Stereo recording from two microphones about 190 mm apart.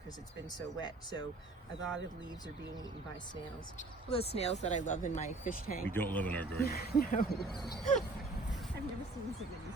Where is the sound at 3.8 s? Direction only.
30° left (ahead or behind); by 5.8 s 50° left (ahead or behind).